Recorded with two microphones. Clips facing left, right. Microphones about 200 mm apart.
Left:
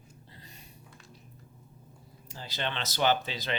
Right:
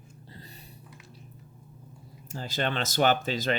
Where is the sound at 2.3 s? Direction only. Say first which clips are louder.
Right 5 dB; 45° right (ahead or behind).